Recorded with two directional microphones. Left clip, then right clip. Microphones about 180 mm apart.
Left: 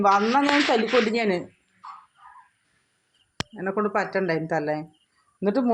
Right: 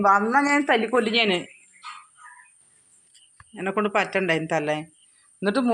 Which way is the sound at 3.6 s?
10° right (ahead or behind).